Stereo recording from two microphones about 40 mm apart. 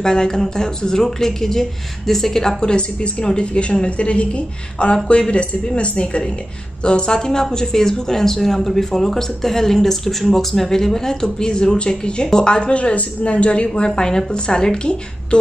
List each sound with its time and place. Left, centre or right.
0.0 s a woman's voice: centre